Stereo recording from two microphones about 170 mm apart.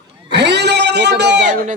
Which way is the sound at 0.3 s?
90° right.